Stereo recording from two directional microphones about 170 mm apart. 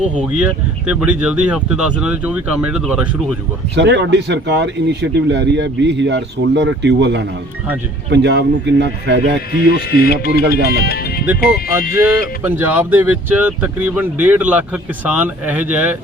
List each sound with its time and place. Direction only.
0.3 s speech: 5° right (ahead or behind)
3.8 s speech: 90° right
9.6 s speech: 65° left (ahead or behind)
12.4 s speech: 10° right (ahead or behind)